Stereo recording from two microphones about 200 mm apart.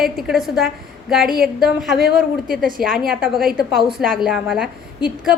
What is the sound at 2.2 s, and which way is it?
Speech, 45° right (ahead or behind).